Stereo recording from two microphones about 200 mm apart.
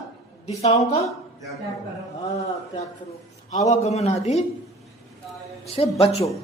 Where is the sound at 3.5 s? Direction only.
35° left (ahead or behind).